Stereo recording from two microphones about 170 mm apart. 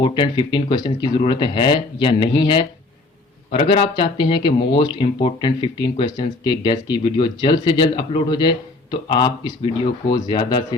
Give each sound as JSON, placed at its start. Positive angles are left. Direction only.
{"t": 0.0, "sound": "speech", "side_deg": 30}